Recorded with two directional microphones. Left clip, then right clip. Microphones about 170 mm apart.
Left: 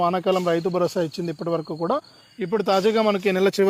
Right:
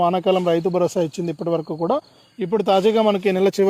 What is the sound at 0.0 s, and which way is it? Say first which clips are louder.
Speech: right 3 dB; 30° right (ahead or behind).